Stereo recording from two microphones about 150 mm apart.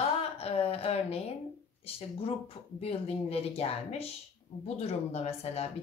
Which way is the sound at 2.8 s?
40° left (ahead or behind).